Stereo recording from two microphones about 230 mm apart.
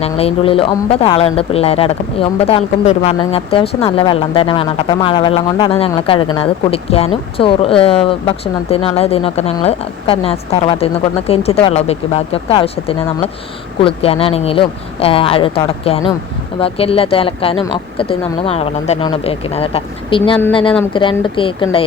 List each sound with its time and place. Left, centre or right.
0.0 s speech: left
13.8 s speech: left